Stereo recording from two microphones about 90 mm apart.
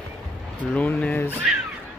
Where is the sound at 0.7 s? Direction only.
20° left (ahead or behind).